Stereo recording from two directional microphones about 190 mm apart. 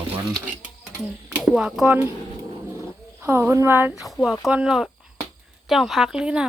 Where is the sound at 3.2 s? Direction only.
10° right (ahead or behind).